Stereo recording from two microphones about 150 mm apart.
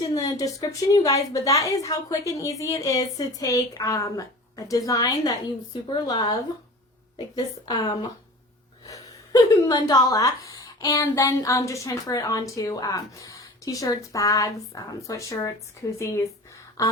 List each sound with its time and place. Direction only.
0.1 s speech: 20° left (ahead or behind)
7.3 s speech: 30° left (ahead or behind)